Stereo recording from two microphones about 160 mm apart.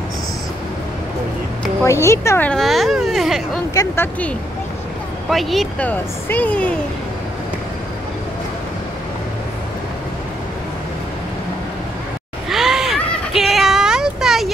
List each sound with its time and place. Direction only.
1.8 s speech: 15° left (ahead or behind); by 3.4 s centre (ahead or behind)
3.7 s speech: 20° left (ahead or behind)
5.3 s speech: centre (ahead or behind)
12.4 s a sound: centre (ahead or behind)